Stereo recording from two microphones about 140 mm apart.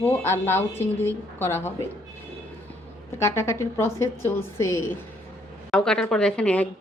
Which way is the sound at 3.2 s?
20° left (ahead or behind).